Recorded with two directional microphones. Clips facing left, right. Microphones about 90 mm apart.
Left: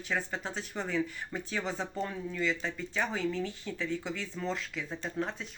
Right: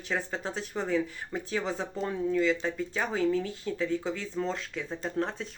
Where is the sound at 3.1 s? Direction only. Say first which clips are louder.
Right 5 dB; 40° right (ahead or behind).